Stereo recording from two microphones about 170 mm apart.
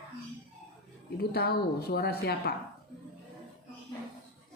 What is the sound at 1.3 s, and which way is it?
A woman's voice, 65° left (ahead or behind).